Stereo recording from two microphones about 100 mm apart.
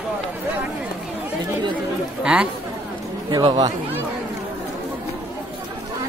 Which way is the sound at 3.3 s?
45° right (ahead or behind).